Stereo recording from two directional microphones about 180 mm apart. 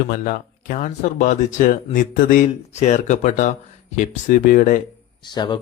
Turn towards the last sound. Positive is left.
turn(degrees=25)  # may be behind; listen again after turning